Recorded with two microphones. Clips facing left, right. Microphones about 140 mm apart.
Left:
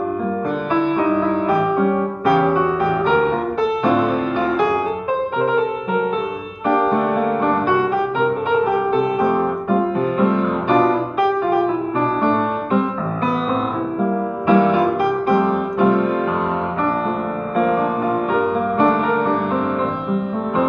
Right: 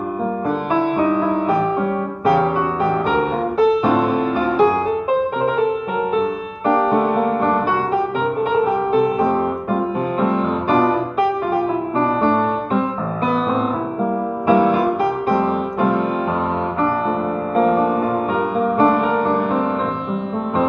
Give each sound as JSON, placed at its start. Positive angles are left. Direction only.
{"t": 0.7, "sound": "music", "side_deg": -35}
{"t": 14.5, "sound": "music", "side_deg": -5}